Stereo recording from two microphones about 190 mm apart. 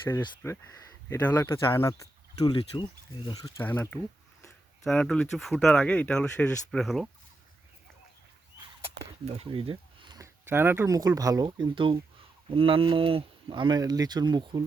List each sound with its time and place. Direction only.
0.1 s speech: 15° left (ahead or behind)
3.6 s speech: 10° left (ahead or behind)
9.2 s speech: 30° right (ahead or behind)